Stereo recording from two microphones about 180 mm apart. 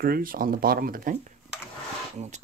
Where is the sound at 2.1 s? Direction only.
40° right (ahead or behind).